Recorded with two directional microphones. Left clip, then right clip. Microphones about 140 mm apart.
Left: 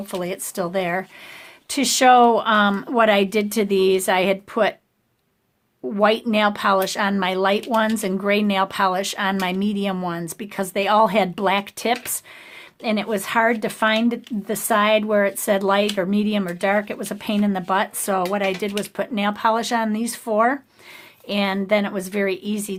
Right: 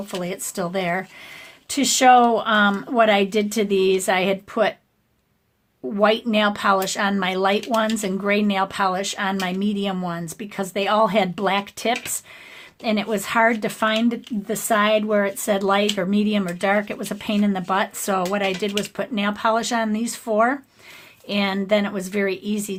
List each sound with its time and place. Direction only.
0.1 s speech: 30° left (ahead or behind)
5.9 s speech: 30° left (ahead or behind)
12.8 s speech: 20° left (ahead or behind)